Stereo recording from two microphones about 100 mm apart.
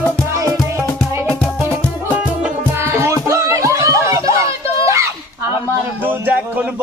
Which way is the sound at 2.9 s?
30° right (ahead or behind).